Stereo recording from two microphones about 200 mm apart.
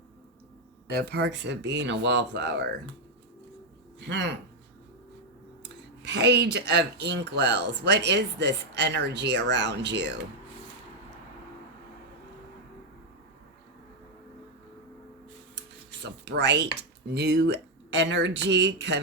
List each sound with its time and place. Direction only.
0.9 s speech: 55° right (ahead or behind)
5.6 s speech: 60° right (ahead or behind)
16.0 s speech: 55° right (ahead or behind)